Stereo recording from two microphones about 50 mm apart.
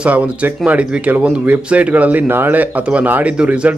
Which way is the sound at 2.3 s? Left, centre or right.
Right.